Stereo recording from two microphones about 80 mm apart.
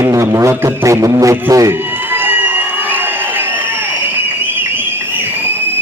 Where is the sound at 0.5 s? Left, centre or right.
Right.